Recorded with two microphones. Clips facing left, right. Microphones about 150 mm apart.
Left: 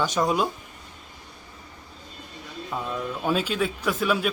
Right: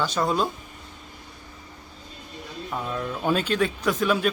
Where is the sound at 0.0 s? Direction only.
15° left (ahead or behind).